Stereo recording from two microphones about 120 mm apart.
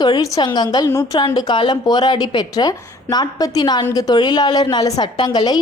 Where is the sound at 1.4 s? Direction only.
40° left (ahead or behind).